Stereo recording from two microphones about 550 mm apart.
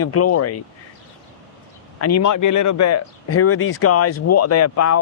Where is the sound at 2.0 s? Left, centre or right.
Left.